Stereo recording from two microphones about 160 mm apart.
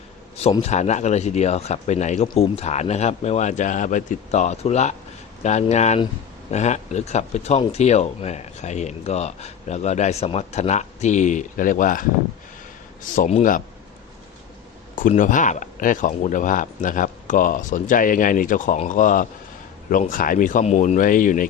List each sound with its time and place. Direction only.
0.6 s speech: 45° left (ahead or behind)
13.1 s speech: 50° left (ahead or behind)
14.9 s speech: 55° left (ahead or behind)